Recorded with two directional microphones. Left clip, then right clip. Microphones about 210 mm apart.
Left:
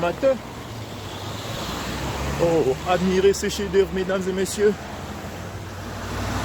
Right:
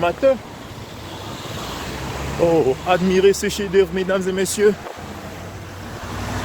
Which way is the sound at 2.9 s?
45° right (ahead or behind).